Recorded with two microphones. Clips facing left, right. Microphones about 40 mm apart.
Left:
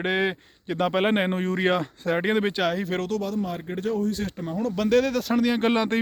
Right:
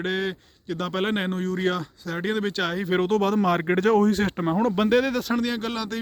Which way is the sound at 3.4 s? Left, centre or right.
Right.